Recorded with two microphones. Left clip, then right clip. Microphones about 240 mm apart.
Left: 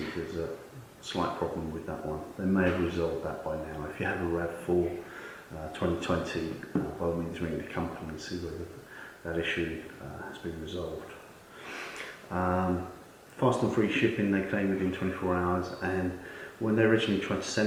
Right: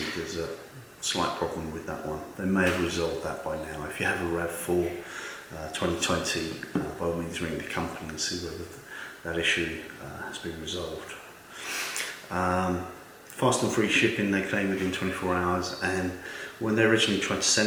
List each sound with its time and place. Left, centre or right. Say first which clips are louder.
0.0 s a sound: right 3 dB; centre
1.1 s speech: right 3 dB; centre
1.9 s speech: right 3 dB; left
2.4 s speech: right 3 dB; centre
3.2 s speech: right 2 dB; centre
6.0 s speech: right 4 dB; centre
6.8 s speech: right 2 dB; left
7.3 s speech: right 3 dB; centre
9.2 s speech: right 5 dB; centre
12.3 s speech: right 2 dB; centre